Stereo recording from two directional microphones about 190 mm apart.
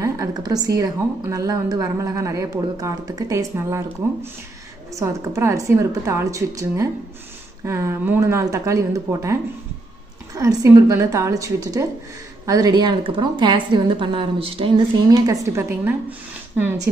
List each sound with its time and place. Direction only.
0.0 s a woman's voice: 20° right (ahead or behind)
15.2 s a woman's voice: 15° right (ahead or behind)